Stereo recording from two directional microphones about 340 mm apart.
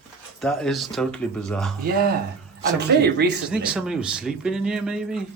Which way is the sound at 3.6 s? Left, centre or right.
Centre.